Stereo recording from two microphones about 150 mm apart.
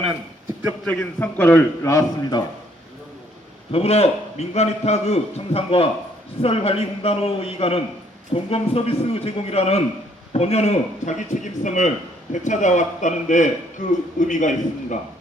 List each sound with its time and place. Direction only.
0.9 s a man's voice: 15° left (ahead or behind)
3.7 s a man's voice: 40° left (ahead or behind)